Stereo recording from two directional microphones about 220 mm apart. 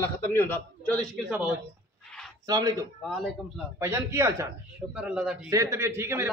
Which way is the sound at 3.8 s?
10° right (ahead or behind).